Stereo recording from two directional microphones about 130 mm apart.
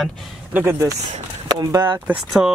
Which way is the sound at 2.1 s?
5° right (ahead or behind).